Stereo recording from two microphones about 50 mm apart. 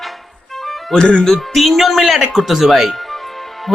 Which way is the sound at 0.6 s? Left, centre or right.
Centre.